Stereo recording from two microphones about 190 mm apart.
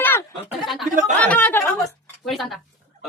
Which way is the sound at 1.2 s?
10° left (ahead or behind).